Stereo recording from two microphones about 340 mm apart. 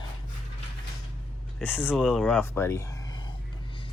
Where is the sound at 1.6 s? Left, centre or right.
Centre.